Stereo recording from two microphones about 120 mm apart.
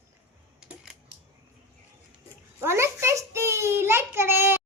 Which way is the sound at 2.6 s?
20° right (ahead or behind).